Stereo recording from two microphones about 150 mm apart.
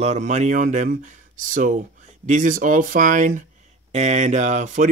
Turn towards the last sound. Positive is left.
turn(degrees=-55)  # may be behind; listen again after turning